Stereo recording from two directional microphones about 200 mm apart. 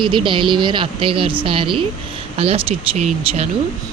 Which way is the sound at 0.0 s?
25° right (ahead or behind).